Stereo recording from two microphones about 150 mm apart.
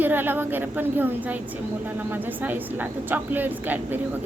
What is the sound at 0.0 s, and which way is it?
Speech, 15° right (ahead or behind).